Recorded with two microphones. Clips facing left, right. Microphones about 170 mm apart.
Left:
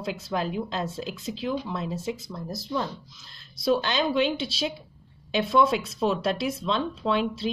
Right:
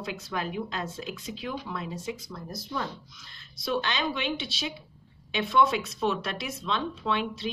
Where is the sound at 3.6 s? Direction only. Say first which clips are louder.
Left 5 dB; 35° left (ahead or behind).